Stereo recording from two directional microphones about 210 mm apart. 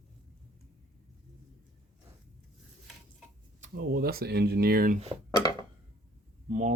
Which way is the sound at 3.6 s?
45° right (ahead or behind).